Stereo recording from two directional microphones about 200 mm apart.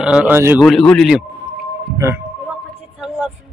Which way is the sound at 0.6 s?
Centre (ahead or behind).